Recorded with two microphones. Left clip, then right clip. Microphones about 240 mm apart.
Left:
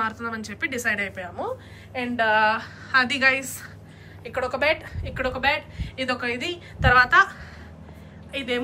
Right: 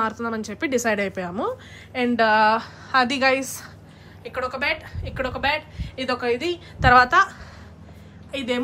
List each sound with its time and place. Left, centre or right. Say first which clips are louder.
0.0 s a woman's voice: right 2 dB; centre
4.2 s a woman's voice: left 1 dB; centre